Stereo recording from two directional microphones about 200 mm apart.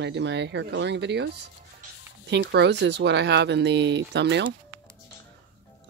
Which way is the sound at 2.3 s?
60° right (ahead or behind).